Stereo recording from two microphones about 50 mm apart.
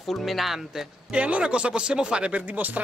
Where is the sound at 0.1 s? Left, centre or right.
Centre.